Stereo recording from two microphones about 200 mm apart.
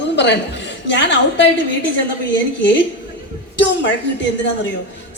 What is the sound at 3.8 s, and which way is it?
Speech, 65° left (ahead or behind).